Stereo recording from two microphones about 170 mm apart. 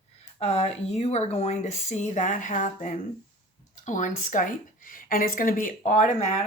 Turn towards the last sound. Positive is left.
turn(degrees=45)  # may be behind; listen again after turning